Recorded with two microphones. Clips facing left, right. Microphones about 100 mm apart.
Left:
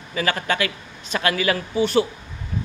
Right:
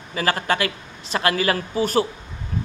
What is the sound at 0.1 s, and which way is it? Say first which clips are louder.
A man's voice: right 1 dB; 35° right (ahead or behind).